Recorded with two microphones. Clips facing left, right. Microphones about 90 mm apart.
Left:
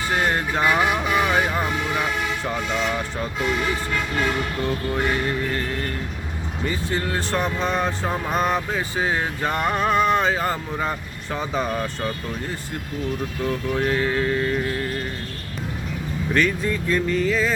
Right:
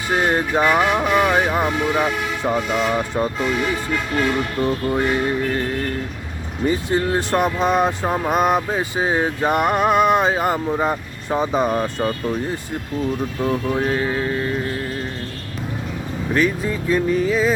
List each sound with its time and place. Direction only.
0.1 s speech: 20° right (ahead or behind)
4.6 s speech: 20° right (ahead or behind)
6.7 s speech: 20° right (ahead or behind)
13.4 s speech: 25° right (ahead or behind); by 14.6 s 10° right (ahead or behind)
16.3 s speech: 10° right (ahead or behind)